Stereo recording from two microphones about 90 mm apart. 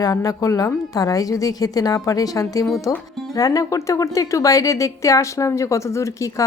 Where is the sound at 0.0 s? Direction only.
40° left (ahead or behind).